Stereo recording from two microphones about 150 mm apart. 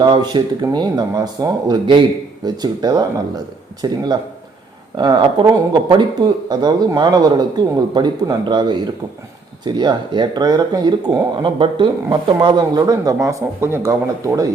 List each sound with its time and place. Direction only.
0.0 s speech: 30° right (ahead or behind)